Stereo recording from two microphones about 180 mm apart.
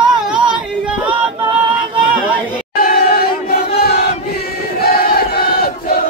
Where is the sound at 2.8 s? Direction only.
55° left (ahead or behind).